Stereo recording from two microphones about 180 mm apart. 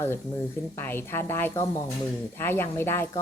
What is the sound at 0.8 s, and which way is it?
Speech, 10° left (ahead or behind).